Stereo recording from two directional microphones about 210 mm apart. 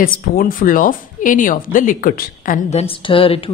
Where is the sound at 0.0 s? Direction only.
40° left (ahead or behind).